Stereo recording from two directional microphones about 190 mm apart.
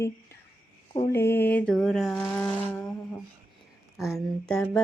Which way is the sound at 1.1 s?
15° left (ahead or behind).